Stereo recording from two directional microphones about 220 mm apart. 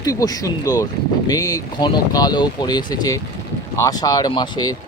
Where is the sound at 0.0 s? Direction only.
15° left (ahead or behind).